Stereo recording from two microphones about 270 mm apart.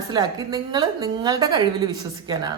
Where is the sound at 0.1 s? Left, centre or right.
Centre.